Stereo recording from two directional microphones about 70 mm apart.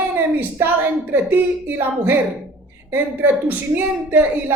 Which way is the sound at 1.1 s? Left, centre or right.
Right.